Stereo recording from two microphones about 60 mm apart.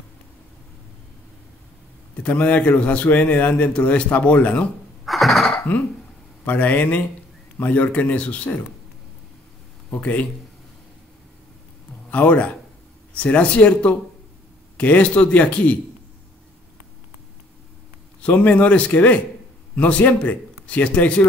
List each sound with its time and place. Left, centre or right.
2.2 s a man's voice: left
5.0 s a sound: centre
6.4 s a man's voice: left
9.8 s speech: left
12.1 s a man's voice: left
18.2 s a man's voice: left